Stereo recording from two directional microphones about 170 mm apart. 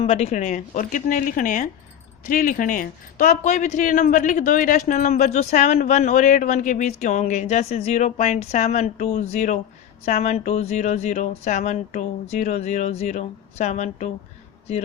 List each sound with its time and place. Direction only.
0.0 s speech: 35° left (ahead or behind)